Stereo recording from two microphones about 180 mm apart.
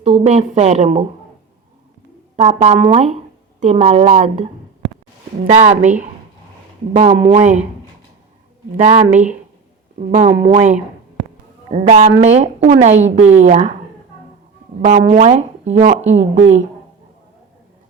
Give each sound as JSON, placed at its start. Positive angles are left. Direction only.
{"t": 0.0, "sound": "speech", "side_deg": -35}
{"t": 2.3, "sound": "speech", "side_deg": -40}
{"t": 5.5, "sound": "speech", "side_deg": -40}
{"t": 6.9, "sound": "speech", "side_deg": -30}
{"t": 8.7, "sound": "speech", "side_deg": -40}
{"t": 14.8, "sound": "speech", "side_deg": -50}